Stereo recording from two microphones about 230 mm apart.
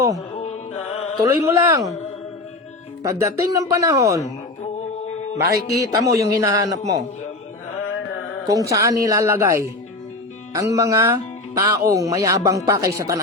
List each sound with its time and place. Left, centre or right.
0.3 s music: left
1.2 s speech: centre
3.0 s speech: centre
5.5 s speech: centre
7.8 s music: left
8.7 s speech: centre